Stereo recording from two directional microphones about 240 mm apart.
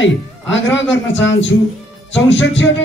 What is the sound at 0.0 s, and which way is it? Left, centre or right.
A man's voice, left.